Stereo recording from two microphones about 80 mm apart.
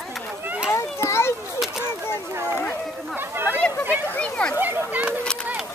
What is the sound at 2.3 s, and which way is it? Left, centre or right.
Speech, right.